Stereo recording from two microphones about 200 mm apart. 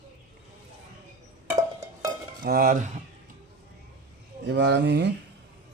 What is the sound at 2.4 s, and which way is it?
Speech, 45° right (ahead or behind).